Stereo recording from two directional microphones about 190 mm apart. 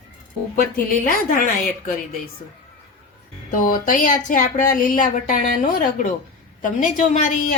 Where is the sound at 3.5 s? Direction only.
45° left (ahead or behind).